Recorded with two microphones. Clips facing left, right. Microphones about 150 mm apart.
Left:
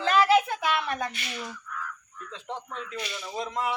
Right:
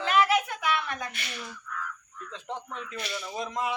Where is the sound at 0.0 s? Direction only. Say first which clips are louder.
Left 3 dB; 35° left (ahead or behind).